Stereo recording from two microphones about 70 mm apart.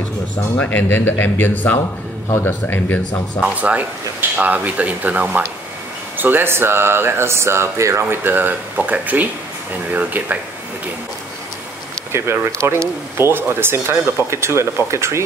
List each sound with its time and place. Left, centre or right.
0.6 s speech: left
3.3 s speech: centre; by 8.0 s right
8.0 s speech: right
13.2 s speech: right